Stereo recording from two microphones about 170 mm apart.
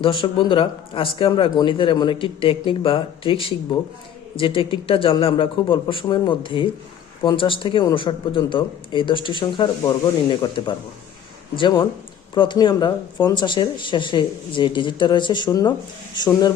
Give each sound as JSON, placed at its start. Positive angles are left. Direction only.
{"t": 0.0, "sound": "speech", "side_deg": 30}